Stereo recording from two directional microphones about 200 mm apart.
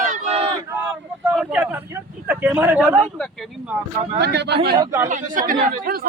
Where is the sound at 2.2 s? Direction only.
10° right (ahead or behind).